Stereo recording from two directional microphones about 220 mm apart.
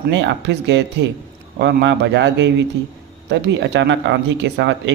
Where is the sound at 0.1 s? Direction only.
55° right (ahead or behind).